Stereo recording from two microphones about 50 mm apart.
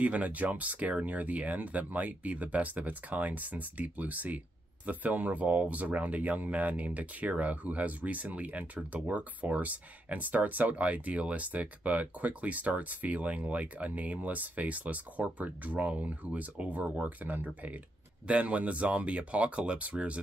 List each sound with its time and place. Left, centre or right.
0.0 s speech: right
17.2 s speech: right